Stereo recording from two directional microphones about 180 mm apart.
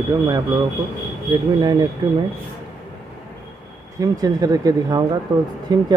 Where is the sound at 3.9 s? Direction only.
20° right (ahead or behind).